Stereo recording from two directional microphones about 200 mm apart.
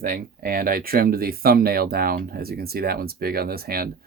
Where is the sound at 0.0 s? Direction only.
45° right (ahead or behind).